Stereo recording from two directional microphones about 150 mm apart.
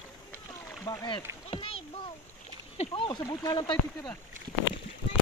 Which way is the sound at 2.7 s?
40° left (ahead or behind).